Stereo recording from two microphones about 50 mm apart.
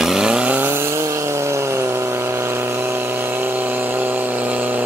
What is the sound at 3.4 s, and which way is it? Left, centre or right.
Vehicle, right.